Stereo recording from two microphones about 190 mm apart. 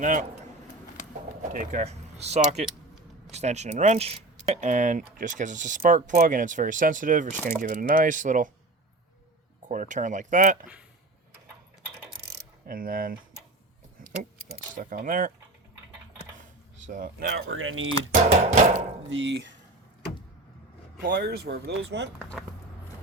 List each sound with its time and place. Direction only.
0.0 s speech: 40° right (ahead or behind)
1.4 s speech: 40° right (ahead or behind)
9.6 s speech: 40° right (ahead or behind)
12.6 s speech: 50° right (ahead or behind)
14.0 s keys jangling: 45° right (ahead or behind)
14.8 s speech: 45° right (ahead or behind)
16.8 s speech: 45° right (ahead or behind); by 17.9 s 90° right
18.4 s speech: 35° right (ahead or behind)
19.1 s speech: 75° right (ahead or behind)
21.0 s speech: 60° right (ahead or behind)
22.2 s speech: 5° left (ahead or behind)